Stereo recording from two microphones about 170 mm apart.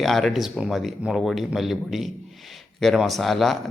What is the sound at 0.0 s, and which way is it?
A man's voice, centre (ahead or behind).